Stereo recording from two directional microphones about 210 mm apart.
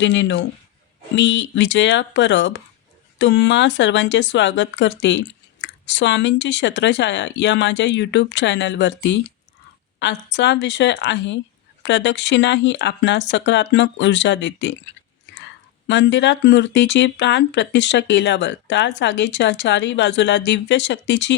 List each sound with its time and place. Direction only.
0.0 s speech: 60° left (ahead or behind)
15.3 s clicking: 55° left (ahead or behind)
15.9 s speech: 60° left (ahead or behind)